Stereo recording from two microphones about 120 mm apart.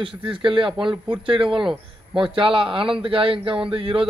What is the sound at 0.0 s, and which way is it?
A man's voice, 45° right (ahead or behind).